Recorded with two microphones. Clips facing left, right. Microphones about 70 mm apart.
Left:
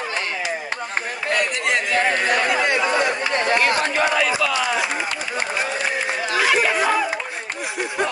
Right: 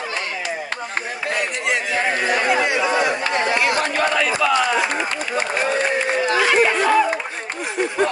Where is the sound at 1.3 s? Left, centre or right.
Left.